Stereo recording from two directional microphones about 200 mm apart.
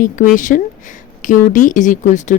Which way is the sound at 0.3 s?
40° left (ahead or behind).